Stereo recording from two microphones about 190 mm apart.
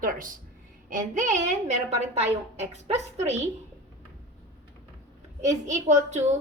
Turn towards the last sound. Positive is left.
turn(degrees=-40)  # may be behind; listen again after turning